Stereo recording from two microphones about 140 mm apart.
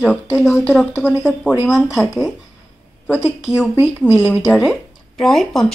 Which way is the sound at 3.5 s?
10° right (ahead or behind).